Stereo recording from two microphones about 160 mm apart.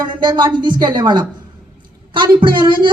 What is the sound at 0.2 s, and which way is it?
A woman's voice, 30° right (ahead or behind).